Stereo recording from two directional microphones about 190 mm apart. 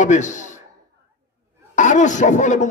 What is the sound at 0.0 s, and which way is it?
Speech, 40° left (ahead or behind).